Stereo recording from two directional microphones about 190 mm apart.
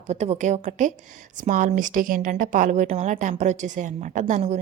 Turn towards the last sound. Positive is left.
turn(degrees=-40)  # may be behind; listen again after turning